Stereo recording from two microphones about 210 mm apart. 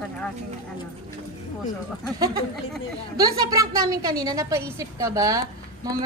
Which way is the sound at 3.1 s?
15° right (ahead or behind).